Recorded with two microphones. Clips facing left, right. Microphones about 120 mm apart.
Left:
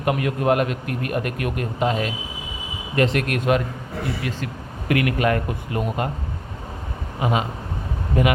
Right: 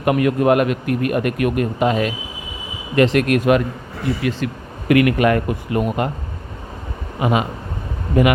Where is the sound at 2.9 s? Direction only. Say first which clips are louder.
Right 6 dB; 85° right.